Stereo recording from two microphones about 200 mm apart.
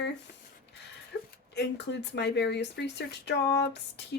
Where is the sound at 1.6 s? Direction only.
60° left (ahead or behind).